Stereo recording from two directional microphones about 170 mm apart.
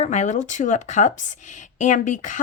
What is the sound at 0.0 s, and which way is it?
Speech, 40° left (ahead or behind).